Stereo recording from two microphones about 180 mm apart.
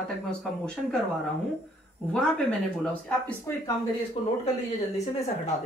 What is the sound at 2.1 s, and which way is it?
Speech, 5° left (ahead or behind).